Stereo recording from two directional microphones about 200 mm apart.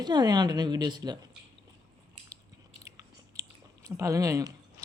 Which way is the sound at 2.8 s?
15° right (ahead or behind).